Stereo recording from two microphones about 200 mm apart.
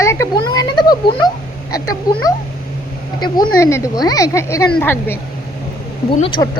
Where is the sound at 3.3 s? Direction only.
15° left (ahead or behind).